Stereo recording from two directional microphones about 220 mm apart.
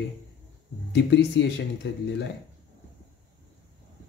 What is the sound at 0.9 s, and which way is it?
Speech, 50° left (ahead or behind).